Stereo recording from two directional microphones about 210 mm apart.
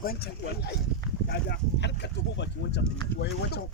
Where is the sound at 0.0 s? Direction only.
45° left (ahead or behind).